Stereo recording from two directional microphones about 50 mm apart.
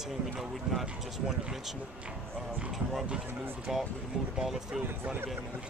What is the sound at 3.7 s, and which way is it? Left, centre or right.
Speech, centre.